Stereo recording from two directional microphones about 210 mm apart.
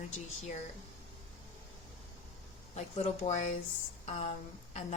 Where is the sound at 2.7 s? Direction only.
30° left (ahead or behind).